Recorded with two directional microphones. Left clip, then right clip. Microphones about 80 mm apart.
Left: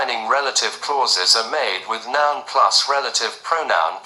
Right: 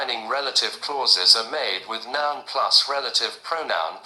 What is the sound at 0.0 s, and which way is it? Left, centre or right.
A man's voice, right.